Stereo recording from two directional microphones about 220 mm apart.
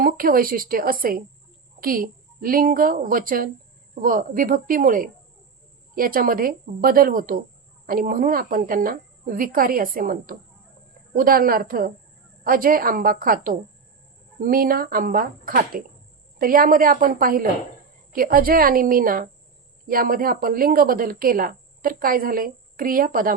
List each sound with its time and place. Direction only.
0.0 s a woman's voice: 40° right (ahead or behind)